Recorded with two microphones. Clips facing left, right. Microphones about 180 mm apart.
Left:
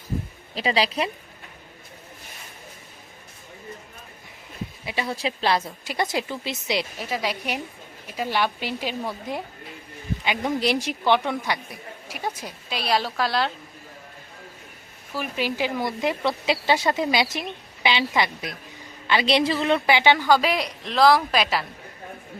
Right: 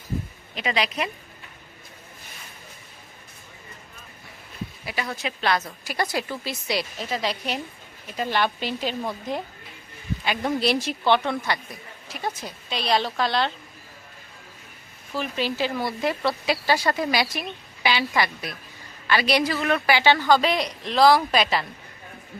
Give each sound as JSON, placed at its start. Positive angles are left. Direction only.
{"t": 0.5, "sound": "a woman's voice", "side_deg": 30}
{"t": 4.9, "sound": "a woman's voice", "side_deg": 25}
{"t": 7.0, "sound": "a woman's voice", "side_deg": 10}
{"t": 15.1, "sound": "a woman's voice", "side_deg": 10}
{"t": 19.0, "sound": "a woman's voice", "side_deg": 20}